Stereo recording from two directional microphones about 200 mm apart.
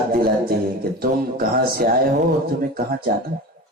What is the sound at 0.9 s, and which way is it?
Speech, 50° right (ahead or behind).